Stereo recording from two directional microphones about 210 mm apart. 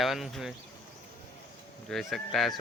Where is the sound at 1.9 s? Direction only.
Centre (ahead or behind).